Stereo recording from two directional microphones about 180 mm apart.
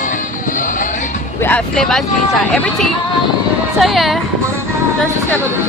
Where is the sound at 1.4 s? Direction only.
5° left (ahead or behind).